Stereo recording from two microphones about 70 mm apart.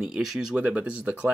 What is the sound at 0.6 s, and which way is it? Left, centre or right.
Speech, centre.